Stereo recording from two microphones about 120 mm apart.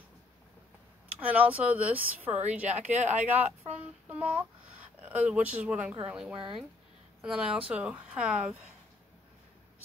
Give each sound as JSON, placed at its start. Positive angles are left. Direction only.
{"t": 1.3, "sound": "a woman's voice", "side_deg": -10}